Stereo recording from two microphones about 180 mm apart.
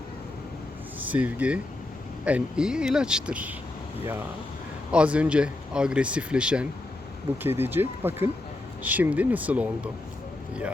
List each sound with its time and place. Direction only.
0.9 s speech: 10° right (ahead or behind)
4.9 s speech: 5° right (ahead or behind)